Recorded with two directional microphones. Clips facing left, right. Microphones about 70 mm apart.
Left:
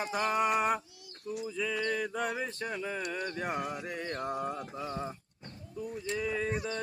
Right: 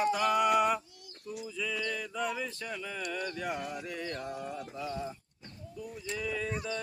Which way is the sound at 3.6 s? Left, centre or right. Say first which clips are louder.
Left 2 dB; centre.